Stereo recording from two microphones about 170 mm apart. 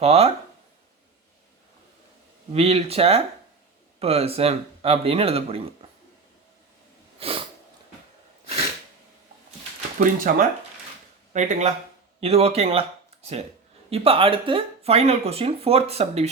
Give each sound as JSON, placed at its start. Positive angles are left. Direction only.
{"t": 0.0, "sound": "speech", "side_deg": -35}
{"t": 2.5, "sound": "speech", "side_deg": -35}
{"t": 7.2, "sound": "sneeze", "side_deg": -35}
{"t": 10.0, "sound": "speech", "side_deg": -55}
{"t": 13.9, "sound": "speech", "side_deg": -35}